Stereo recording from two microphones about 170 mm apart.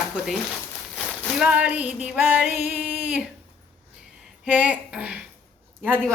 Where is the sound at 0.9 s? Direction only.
Centre (ahead or behind).